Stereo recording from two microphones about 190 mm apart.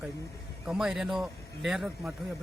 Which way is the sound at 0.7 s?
5° right (ahead or behind).